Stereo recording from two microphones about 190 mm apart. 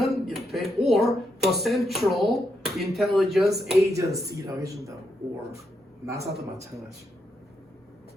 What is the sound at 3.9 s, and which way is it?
Speech, 15° right (ahead or behind).